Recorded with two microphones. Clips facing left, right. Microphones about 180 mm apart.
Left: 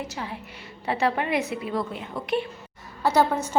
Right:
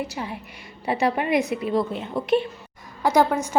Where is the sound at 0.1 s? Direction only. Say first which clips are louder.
Right 2 dB; 15° right (ahead or behind).